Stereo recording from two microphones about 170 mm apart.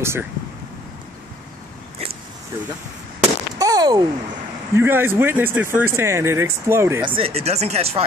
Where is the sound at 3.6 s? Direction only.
20° right (ahead or behind).